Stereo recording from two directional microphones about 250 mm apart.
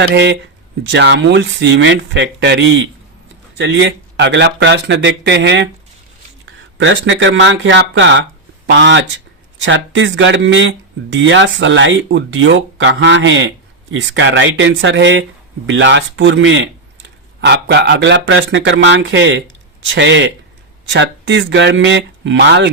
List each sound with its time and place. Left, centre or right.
0.0 s speech: right